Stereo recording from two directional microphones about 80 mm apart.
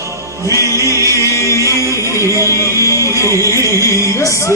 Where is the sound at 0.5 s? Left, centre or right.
Right.